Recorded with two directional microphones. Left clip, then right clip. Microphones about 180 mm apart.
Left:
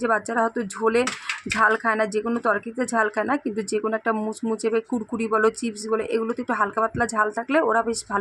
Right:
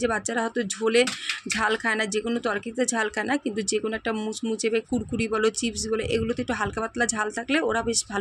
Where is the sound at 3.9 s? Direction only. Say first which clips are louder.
Left 5 dB; 20° right (ahead or behind).